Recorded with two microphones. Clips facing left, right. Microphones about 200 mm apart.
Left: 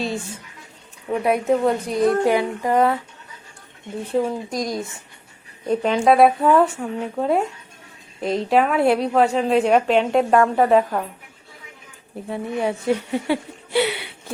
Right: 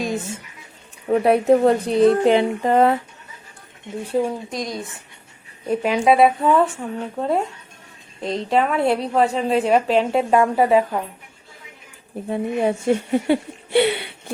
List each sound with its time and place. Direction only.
0.0 s speech: 15° right (ahead or behind)
1.1 s a woman's voice: 35° right (ahead or behind)
4.2 s a woman's voice: centre (ahead or behind)
12.3 s a woman's voice: 20° right (ahead or behind)
13.3 s speech: 55° right (ahead or behind)